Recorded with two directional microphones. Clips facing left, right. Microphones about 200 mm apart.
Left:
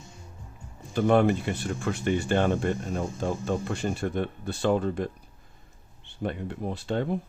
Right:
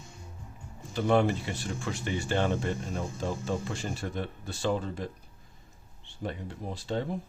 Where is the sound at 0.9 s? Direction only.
55° left (ahead or behind).